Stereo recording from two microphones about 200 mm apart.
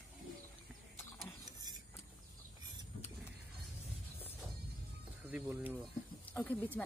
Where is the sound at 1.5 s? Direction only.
20° right (ahead or behind).